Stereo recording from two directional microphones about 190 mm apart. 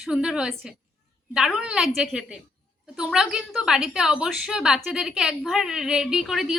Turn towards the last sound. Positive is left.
turn(degrees=0)  # may be behind; listen again after turning